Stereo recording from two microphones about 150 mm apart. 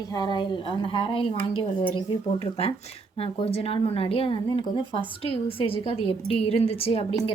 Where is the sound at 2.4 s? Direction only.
40° left (ahead or behind).